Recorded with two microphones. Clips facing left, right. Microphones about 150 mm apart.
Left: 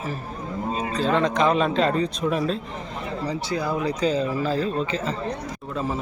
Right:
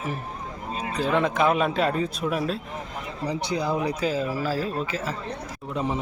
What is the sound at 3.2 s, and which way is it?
Speech, 15° right (ahead or behind).